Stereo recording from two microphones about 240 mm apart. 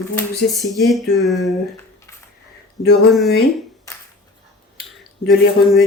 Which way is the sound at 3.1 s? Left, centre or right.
Centre.